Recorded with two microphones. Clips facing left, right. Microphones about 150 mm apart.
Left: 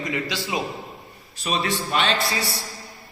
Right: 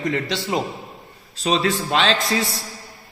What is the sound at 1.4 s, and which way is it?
Speech, 90° right.